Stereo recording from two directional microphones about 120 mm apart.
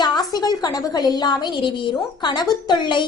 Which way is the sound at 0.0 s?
35° left (ahead or behind).